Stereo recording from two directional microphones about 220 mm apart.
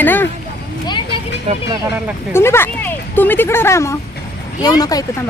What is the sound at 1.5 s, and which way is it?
Speech, 25° right (ahead or behind).